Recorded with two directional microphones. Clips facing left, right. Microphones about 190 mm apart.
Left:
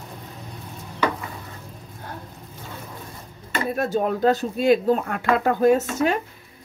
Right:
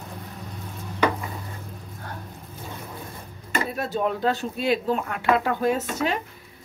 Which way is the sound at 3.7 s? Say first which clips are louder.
Left 5 dB; 45° left (ahead or behind).